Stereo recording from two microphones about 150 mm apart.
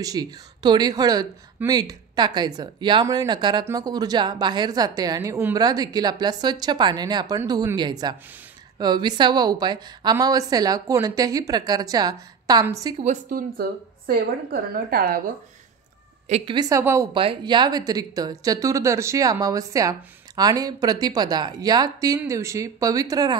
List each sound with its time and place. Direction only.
0.0 s a woman's voice: 25° right (ahead or behind)
13.0 s a woman's voice: 60° right (ahead or behind); by 15.2 s 75° right (ahead or behind)
16.3 s a woman's voice: 45° right (ahead or behind)
16.5 s a woman's voice: 20° right (ahead or behind)
17.1 s a woman's voice: 35° right (ahead or behind)